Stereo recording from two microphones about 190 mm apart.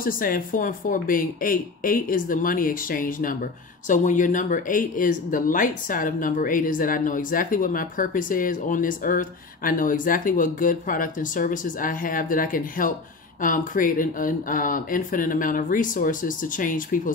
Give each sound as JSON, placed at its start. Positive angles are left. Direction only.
{"t": 0.0, "sound": "speech", "side_deg": 50}